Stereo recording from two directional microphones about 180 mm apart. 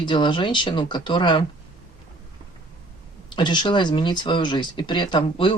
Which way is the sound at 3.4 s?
25° left (ahead or behind).